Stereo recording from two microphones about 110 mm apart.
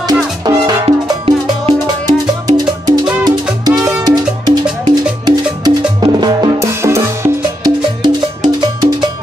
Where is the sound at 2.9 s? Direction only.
35° right (ahead or behind).